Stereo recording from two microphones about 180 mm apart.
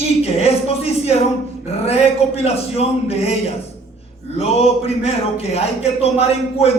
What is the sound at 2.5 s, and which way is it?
A man's voice, 35° left (ahead or behind).